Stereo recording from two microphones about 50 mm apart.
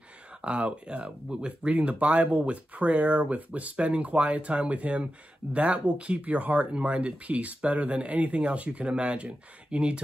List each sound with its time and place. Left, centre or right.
0.4 s speech: right